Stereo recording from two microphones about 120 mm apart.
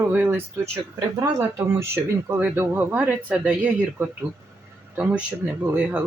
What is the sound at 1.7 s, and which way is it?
Speech, 20° right (ahead or behind).